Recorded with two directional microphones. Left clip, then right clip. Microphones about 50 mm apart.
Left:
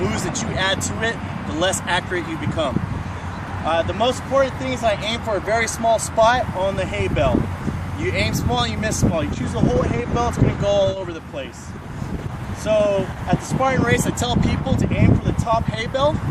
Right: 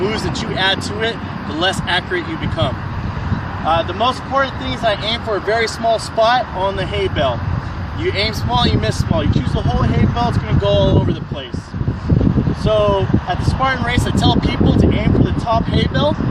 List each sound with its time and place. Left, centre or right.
0.0 s speech: left
12.6 s speech: left